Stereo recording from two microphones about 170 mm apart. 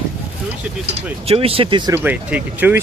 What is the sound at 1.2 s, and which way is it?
Speech, 35° right (ahead or behind).